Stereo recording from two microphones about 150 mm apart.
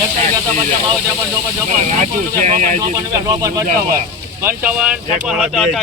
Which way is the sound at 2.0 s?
55° right (ahead or behind).